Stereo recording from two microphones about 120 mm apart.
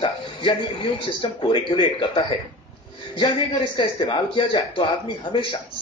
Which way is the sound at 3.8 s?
45° left (ahead or behind).